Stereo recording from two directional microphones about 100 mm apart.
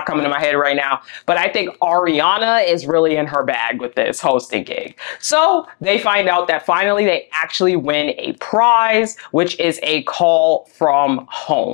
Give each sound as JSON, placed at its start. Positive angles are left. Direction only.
{"t": 0.0, "sound": "speech", "side_deg": 25}